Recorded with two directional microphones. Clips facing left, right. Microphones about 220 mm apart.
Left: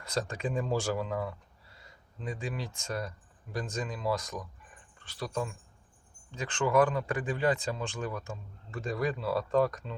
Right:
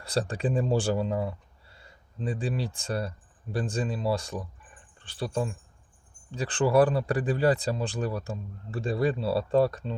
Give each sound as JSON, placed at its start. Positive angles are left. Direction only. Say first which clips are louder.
{"t": 0.0, "sound": "speech", "louder": "right 5 dB", "side_deg": -30}